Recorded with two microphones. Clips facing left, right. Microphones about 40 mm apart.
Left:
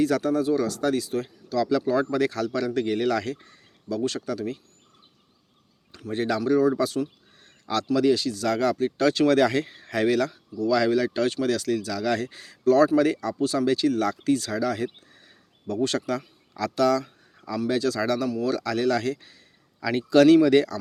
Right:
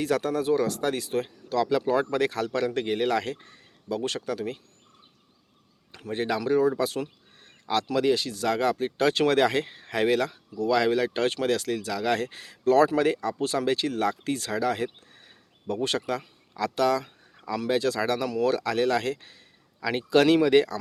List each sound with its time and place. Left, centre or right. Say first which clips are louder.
0.0 s speech: left 3 dB; right
6.1 s speech: left 2 dB; right
7.4 s a sound: right 1 dB; right
7.9 s speech: left 4 dB; right
19.8 s speech: left 4 dB; right